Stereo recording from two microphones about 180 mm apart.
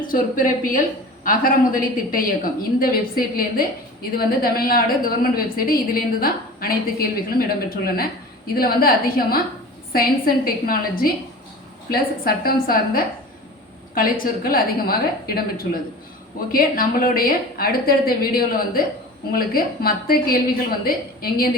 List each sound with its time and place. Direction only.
0.0 s a woman's voice: 50° left (ahead or behind)